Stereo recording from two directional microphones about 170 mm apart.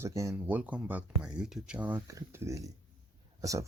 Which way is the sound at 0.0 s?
20° right (ahead or behind).